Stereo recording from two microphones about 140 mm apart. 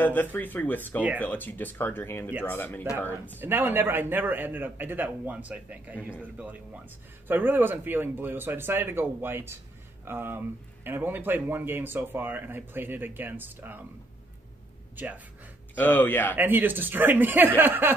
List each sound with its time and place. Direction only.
0.0 s speech: 15° left (ahead or behind)
3.3 s speech: 15° right (ahead or behind)
15.7 s speech: 15° left (ahead or behind)
16.3 s speech: 15° right (ahead or behind)